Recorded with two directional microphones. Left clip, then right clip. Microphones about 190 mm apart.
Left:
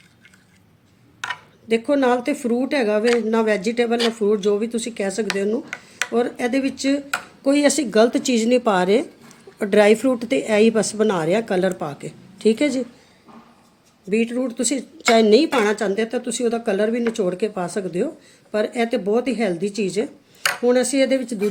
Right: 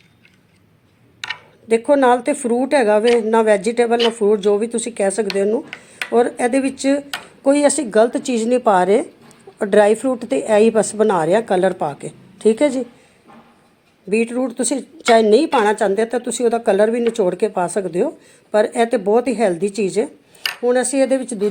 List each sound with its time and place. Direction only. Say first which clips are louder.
1.6 s speech: right 5 dB; 15° left (ahead or behind)
14.1 s speech: right 3 dB; 5° left (ahead or behind)
21.0 s speech: right 2 dB; 15° left (ahead or behind)